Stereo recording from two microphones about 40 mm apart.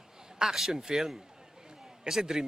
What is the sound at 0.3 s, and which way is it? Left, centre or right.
A man's voice, centre.